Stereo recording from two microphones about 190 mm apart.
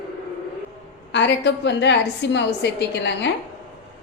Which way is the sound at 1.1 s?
65° left (ahead or behind).